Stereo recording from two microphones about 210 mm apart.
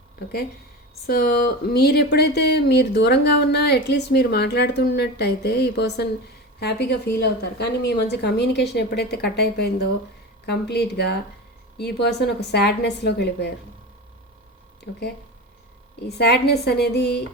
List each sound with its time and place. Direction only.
1.0 s speech: 50° left (ahead or behind)
16.0 s speech: 50° left (ahead or behind)